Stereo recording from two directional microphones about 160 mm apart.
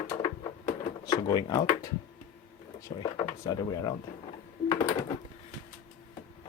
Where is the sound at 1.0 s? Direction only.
25° left (ahead or behind).